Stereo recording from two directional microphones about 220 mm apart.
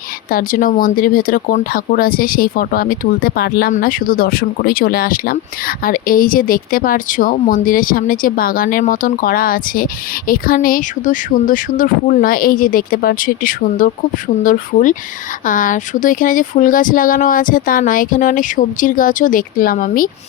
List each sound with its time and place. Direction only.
0.3 s speech: 40° left (ahead or behind)